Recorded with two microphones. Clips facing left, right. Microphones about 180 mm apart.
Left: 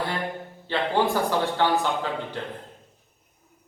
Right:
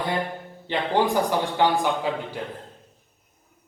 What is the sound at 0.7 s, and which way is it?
A man's voice, 15° right (ahead or behind).